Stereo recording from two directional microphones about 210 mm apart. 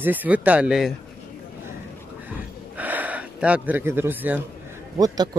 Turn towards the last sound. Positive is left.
turn(degrees=-20)  # may be behind; listen again after turning